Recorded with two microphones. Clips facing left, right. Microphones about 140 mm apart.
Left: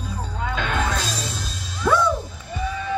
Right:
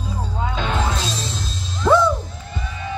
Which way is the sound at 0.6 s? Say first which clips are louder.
Right 1 dB; 25° right (ahead or behind).